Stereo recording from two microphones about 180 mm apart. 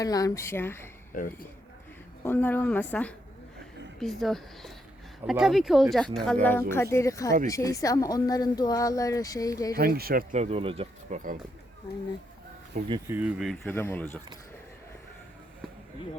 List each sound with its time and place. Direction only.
0.0 s speech: 20° left (ahead or behind)
1.1 s speech: 50° left (ahead or behind)
2.2 s speech: 10° left (ahead or behind)
6.4 s speech: 10° left (ahead or behind)
9.7 s speech: 60° right (ahead or behind)
10.3 s speech: 35° right (ahead or behind)
13.1 s speech: 10° right (ahead or behind)
13.7 s speech: 10° left (ahead or behind)